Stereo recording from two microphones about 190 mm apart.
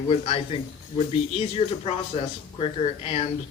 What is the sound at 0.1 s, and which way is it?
A man's voice, 35° left (ahead or behind).